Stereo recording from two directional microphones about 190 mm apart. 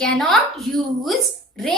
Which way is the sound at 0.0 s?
5° left (ahead or behind).